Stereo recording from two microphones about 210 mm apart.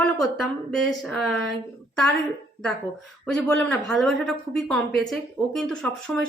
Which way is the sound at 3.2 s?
5° left (ahead or behind).